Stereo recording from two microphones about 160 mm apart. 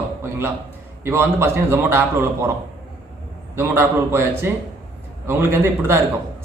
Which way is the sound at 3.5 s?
15° right (ahead or behind).